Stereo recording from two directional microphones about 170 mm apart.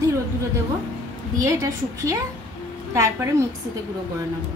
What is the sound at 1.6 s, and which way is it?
Speech, 20° right (ahead or behind).